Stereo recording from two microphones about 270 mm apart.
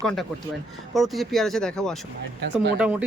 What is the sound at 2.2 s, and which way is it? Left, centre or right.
Speech, right.